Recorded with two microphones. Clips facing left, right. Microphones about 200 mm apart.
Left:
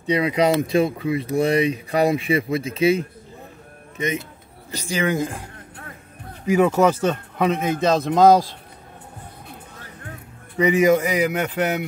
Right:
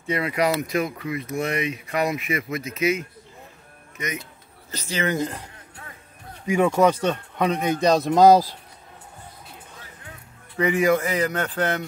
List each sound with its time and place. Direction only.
0.0 s speech: 20° left (ahead or behind)
4.6 s speech: 15° left (ahead or behind); by 8.5 s 5° right (ahead or behind)
10.6 s speech: 20° left (ahead or behind)